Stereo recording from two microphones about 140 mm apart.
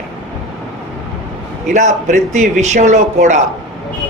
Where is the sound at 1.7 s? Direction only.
60° right (ahead or behind).